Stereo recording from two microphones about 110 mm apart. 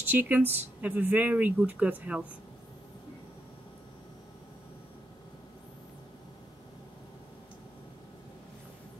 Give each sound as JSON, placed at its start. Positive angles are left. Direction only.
{"t": 0.0, "sound": "speech", "side_deg": -15}